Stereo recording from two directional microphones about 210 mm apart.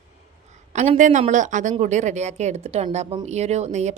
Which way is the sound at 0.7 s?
35° right (ahead or behind).